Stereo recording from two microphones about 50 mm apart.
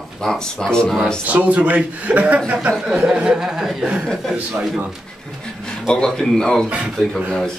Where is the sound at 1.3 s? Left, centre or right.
Right.